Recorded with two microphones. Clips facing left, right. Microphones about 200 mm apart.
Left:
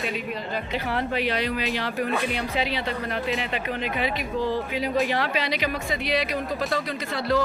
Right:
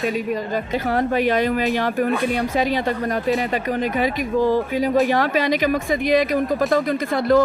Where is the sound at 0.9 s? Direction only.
45° right (ahead or behind).